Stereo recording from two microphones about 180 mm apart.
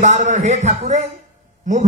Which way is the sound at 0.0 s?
40° right (ahead or behind).